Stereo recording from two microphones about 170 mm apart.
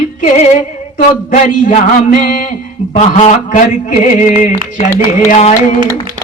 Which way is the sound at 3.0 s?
40° left (ahead or behind).